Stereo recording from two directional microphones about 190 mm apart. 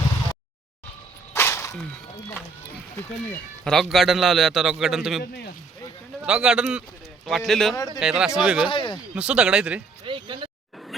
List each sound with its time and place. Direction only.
1.3 s a sound: 15° left (ahead or behind)
3.2 s a man's voice: 5° left (ahead or behind)
5.2 s speech: 55° left (ahead or behind)
6.2 s a man's voice: 5° right (ahead or behind)
8.6 s speech: 25° left (ahead or behind)
9.1 s a man's voice: 5° right (ahead or behind)
10.1 s speech: 25° right (ahead or behind)